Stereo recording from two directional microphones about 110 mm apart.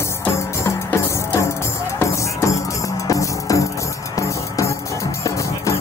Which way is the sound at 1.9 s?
25° left (ahead or behind).